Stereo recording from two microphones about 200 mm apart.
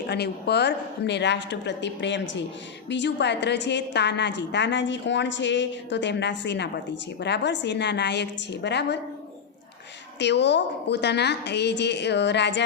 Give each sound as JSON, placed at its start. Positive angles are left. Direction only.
{"t": 0.1, "sound": "a woman's voice", "side_deg": 55}
{"t": 10.2, "sound": "a woman's voice", "side_deg": 60}